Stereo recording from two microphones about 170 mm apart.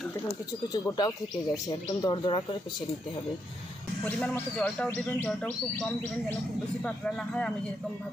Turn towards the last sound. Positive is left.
turn(degrees=5)  # may be behind; listen again after turning